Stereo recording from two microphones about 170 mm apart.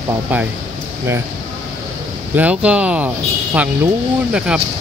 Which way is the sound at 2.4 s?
5° right (ahead or behind).